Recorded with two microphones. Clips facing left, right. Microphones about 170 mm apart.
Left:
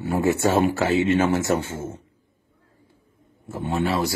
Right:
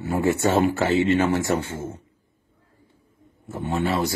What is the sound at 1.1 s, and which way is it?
Speech, 20° left (ahead or behind).